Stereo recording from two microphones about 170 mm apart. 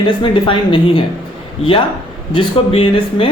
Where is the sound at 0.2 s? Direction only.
30° left (ahead or behind).